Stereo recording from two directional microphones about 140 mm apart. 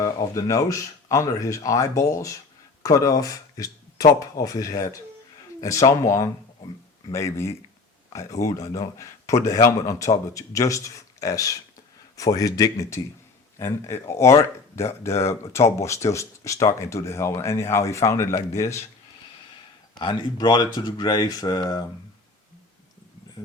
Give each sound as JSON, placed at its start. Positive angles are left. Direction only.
{"t": 0.0, "sound": "speech", "side_deg": 25}
{"t": 19.9, "sound": "speech", "side_deg": 35}